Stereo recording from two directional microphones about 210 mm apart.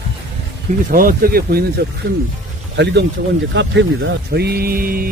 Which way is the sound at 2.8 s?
55° right (ahead or behind).